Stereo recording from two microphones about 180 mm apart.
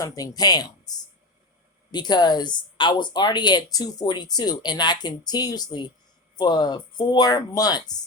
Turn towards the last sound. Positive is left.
turn(degrees=20)  # may be behind; listen again after turning